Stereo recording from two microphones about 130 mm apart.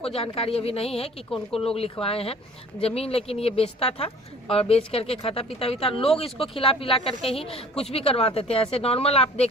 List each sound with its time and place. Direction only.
0.0 s speech: 50° left (ahead or behind)